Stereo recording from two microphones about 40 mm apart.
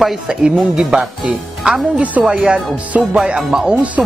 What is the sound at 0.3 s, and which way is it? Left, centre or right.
Speech, centre.